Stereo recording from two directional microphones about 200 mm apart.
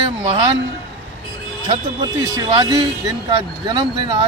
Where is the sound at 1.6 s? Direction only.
20° right (ahead or behind).